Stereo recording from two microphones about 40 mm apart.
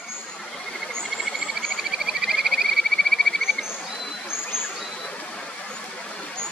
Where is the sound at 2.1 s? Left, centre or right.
Centre.